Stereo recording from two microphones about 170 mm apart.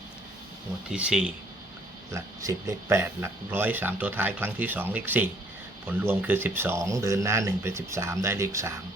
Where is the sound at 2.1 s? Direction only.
20° right (ahead or behind).